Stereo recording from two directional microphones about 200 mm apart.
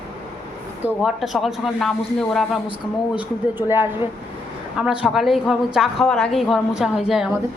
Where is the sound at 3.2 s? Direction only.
10° right (ahead or behind).